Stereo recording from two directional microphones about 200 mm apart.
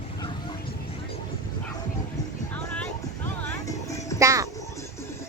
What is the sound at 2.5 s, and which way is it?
Music, 10° left (ahead or behind).